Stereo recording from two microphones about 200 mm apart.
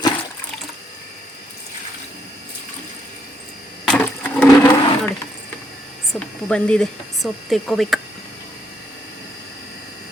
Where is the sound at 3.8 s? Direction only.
5° left (ahead or behind).